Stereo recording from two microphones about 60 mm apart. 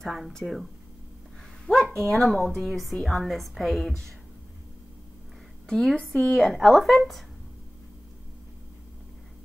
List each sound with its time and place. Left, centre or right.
0.0 s a woman's voice: centre
1.7 s a woman's voice: centre
5.7 s a woman's voice: centre
6.3 s a woman's voice: centre